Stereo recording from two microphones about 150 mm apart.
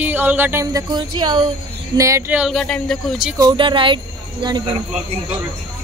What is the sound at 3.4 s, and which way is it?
Speech, 30° right (ahead or behind).